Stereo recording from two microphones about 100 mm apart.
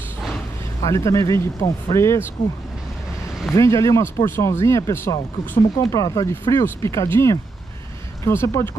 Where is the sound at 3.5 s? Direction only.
30° left (ahead or behind).